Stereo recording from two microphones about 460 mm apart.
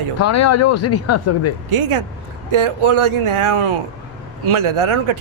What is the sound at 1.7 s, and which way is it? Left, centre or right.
Speech, right.